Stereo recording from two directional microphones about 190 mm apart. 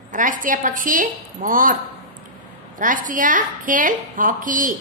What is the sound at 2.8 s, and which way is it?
A woman's voice, 45° right (ahead or behind).